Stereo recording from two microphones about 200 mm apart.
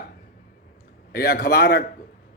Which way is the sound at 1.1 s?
50° left (ahead or behind).